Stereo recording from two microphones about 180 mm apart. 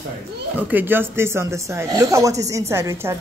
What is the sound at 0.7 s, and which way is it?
Speech, 10° right (ahead or behind).